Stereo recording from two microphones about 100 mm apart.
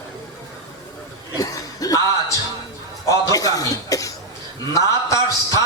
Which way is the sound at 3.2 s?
35° left (ahead or behind).